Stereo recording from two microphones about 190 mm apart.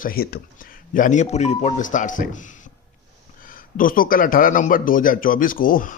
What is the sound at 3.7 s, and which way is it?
A man's voice, 45° left (ahead or behind).